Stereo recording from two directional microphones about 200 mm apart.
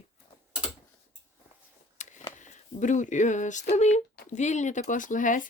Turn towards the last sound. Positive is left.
turn(degrees=40)  # may be behind; listen again after turning